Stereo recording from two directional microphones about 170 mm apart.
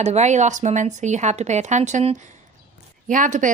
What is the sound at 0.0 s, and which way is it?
A woman's voice, 40° right (ahead or behind).